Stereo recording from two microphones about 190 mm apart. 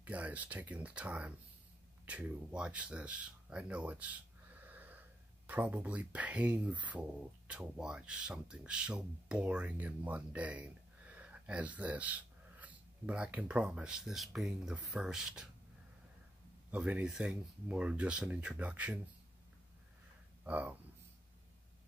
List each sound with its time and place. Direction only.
0.0 s speech: 5° right (ahead or behind)
4.6 s wheeze: 10° right (ahead or behind)
5.5 s speech: 10° right (ahead or behind)
16.7 s speech: 5° right (ahead or behind)
20.4 s speech: 10° right (ahead or behind)